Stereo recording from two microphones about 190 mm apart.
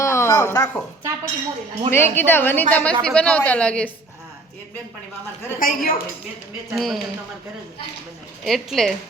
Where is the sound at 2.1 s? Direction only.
10° left (ahead or behind).